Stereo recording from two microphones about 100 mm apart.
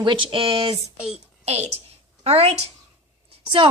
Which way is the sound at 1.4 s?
90° right.